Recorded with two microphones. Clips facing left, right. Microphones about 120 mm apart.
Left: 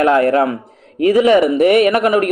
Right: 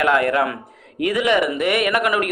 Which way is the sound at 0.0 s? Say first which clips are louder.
Left 5 dB; 35° left (ahead or behind).